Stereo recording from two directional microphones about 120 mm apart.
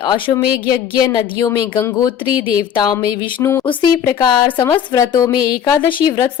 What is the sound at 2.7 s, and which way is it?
Speech, 40° left (ahead or behind).